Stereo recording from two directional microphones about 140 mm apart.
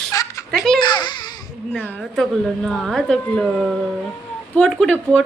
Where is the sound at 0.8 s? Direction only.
30° left (ahead or behind).